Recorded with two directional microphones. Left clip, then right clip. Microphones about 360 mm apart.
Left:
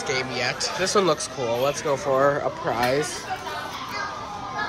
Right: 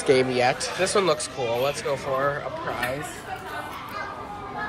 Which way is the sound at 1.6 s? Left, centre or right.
Centre.